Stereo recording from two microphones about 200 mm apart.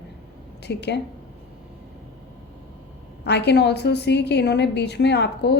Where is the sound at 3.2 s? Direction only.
60° left (ahead or behind).